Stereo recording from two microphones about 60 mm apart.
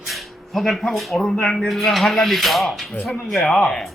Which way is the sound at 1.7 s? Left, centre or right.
Centre.